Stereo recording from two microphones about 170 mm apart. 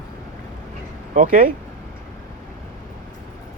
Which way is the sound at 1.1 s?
50° right (ahead or behind).